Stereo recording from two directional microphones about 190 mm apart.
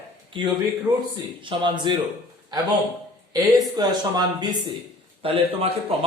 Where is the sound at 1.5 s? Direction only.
25° right (ahead or behind).